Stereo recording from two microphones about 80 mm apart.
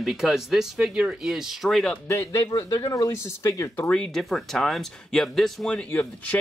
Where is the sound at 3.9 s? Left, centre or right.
Centre.